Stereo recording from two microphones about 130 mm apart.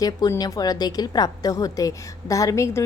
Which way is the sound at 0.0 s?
30° left (ahead or behind).